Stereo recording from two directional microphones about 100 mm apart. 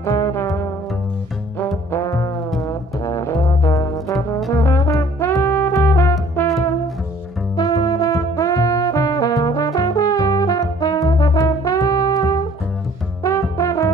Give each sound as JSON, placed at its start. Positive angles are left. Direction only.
{"t": 0.0, "sound": "music", "side_deg": 30}
{"t": 1.9, "sound": "brass instrument", "side_deg": 30}
{"t": 4.5, "sound": "music", "side_deg": 25}
{"t": 7.5, "sound": "brass instrument", "side_deg": 45}